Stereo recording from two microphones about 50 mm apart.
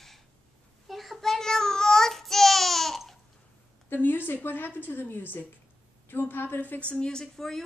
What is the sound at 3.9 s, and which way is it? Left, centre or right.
A woman's voice, left.